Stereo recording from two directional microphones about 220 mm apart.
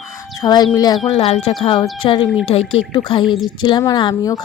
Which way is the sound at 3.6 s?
20° left (ahead or behind).